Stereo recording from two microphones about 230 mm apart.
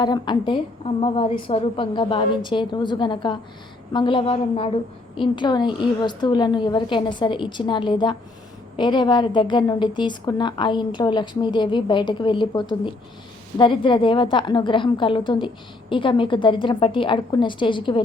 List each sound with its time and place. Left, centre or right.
0.0 s a woman's voice: centre